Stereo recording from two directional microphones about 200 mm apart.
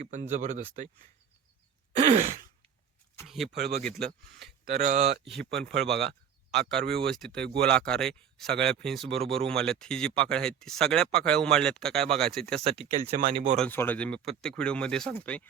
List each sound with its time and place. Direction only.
0.1 s speech: 40° right (ahead or behind)
2.0 s sigh: 40° right (ahead or behind)
3.2 s a sound: centre (ahead or behind)
4.7 s speech: 40° right (ahead or behind)
5.5 s speech: 55° right (ahead or behind)
6.0 s speech: centre (ahead or behind)
6.8 s speech: 55° right (ahead or behind)
7.1 s speech: centre (ahead or behind)
9.2 s speech: 30° right (ahead or behind)
9.5 s speech: 5° left (ahead or behind)
12.6 s speech: 30° right (ahead or behind)
13.6 s speech: 10° left (ahead or behind)